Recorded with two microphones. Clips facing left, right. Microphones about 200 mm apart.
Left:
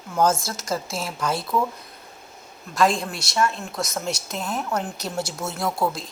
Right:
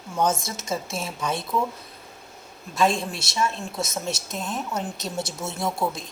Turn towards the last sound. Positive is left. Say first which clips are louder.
# left 2 dB
turn(degrees=-25)  # may be behind; listen again after turning